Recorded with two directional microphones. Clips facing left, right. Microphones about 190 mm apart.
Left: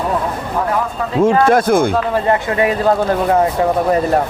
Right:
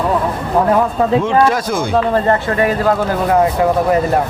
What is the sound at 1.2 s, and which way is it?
Speech, 50° left (ahead or behind).